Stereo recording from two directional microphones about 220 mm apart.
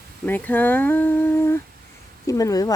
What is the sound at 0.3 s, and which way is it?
Speech, 10° left (ahead or behind).